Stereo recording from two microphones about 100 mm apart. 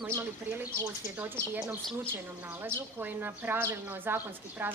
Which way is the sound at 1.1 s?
20° right (ahead or behind).